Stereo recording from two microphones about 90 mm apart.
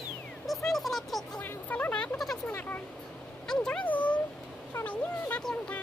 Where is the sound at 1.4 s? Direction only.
20° left (ahead or behind).